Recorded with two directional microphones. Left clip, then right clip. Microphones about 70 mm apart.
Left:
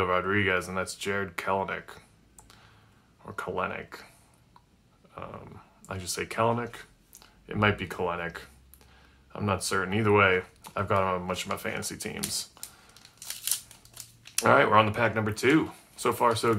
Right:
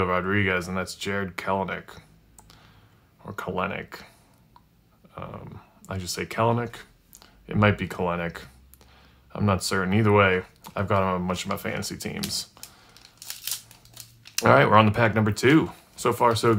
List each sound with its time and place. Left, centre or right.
0.0 s speech: right
5.1 s a sound: right
5.9 s speech: right
12.6 s a sound: right
14.3 s speech: right
16.0 s speech: right